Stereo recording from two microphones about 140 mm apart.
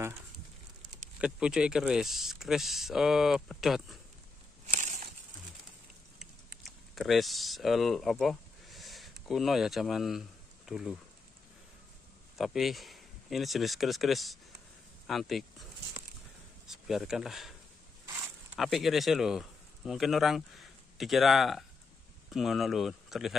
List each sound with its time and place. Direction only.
1.2 s speech: 5° right (ahead or behind)
4.7 s a sound: 60° right (ahead or behind)
6.6 s speech: centre (ahead or behind)
12.4 s speech: centre (ahead or behind)
16.6 s speech: 5° right (ahead or behind)
18.6 s speech: centre (ahead or behind)